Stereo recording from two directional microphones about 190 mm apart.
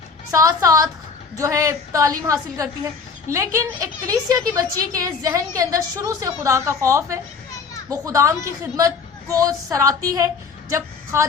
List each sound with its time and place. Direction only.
0.3 s a woman's voice: 15° right (ahead or behind)